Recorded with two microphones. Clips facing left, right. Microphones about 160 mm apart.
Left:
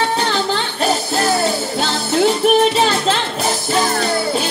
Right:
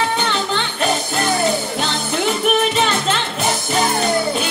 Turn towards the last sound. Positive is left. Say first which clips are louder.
# left 3 dB
turn(degrees=35)  # may be behind; listen again after turning